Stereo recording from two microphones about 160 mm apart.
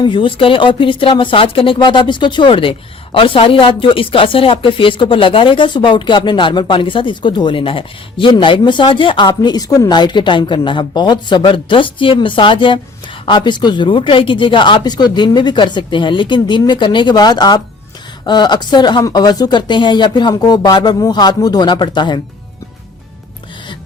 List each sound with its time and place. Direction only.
0.0 s speech: 30° left (ahead or behind)